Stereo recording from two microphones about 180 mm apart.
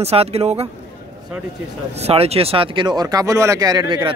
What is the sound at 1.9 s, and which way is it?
Speech, 35° right (ahead or behind).